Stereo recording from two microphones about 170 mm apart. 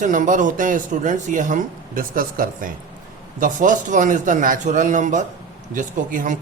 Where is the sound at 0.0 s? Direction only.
50° right (ahead or behind).